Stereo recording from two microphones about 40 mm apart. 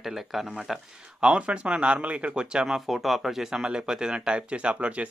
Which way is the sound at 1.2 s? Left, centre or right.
Right.